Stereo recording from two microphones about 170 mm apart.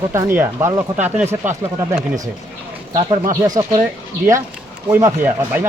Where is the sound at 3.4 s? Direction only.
20° right (ahead or behind).